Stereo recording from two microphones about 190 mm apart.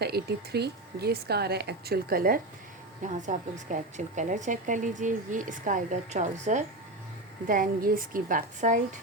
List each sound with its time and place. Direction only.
0.0 s speech: 55° right (ahead or behind)
3.0 s a woman's voice: 40° right (ahead or behind)